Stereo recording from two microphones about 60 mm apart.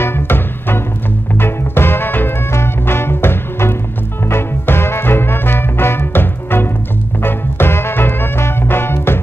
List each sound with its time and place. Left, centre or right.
0.0 s music: left